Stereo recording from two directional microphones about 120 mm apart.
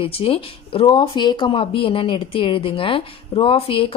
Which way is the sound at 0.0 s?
50° left (ahead or behind).